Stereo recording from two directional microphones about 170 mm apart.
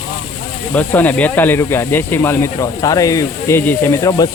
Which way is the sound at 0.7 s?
10° left (ahead or behind).